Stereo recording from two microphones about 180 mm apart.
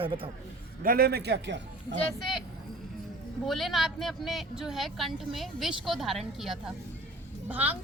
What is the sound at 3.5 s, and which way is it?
A woman's voice, centre (ahead or behind).